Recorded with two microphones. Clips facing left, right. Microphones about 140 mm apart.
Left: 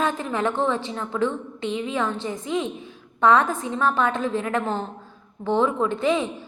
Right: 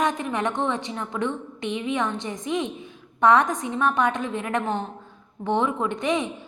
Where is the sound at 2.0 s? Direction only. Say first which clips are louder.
Left 2 dB; 25° left (ahead or behind).